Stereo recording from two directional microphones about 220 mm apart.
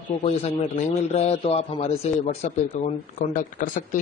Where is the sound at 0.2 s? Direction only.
25° left (ahead or behind).